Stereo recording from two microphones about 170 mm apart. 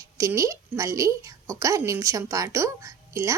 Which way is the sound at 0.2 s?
20° right (ahead or behind).